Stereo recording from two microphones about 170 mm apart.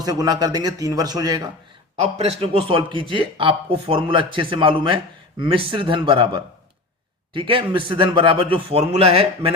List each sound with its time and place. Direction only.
0.0 s a man's voice: 25° right (ahead or behind)
2.0 s speech: 35° right (ahead or behind)